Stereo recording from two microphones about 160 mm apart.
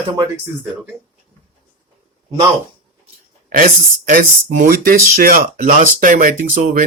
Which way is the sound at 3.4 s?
60° right (ahead or behind).